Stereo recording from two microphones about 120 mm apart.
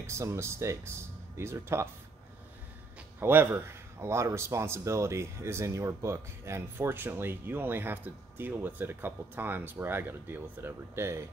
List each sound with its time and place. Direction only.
0.0 s speech: 25° right (ahead or behind)
3.2 s speech: 20° right (ahead or behind)